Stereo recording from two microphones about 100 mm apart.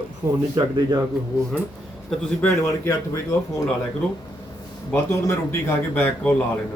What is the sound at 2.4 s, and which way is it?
Speech, 30° left (ahead or behind).